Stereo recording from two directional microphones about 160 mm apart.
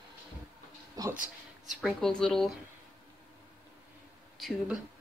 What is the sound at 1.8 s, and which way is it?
Speech, centre (ahead or behind).